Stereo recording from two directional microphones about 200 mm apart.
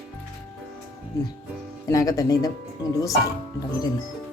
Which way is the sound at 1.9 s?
15° left (ahead or behind).